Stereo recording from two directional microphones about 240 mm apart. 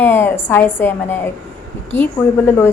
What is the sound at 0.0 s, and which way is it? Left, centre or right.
Speech, centre.